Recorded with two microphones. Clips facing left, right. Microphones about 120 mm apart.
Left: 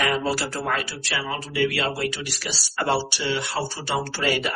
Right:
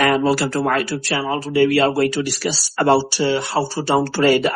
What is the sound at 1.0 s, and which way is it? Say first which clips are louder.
Speech: right 8 dB; 40° right (ahead or behind).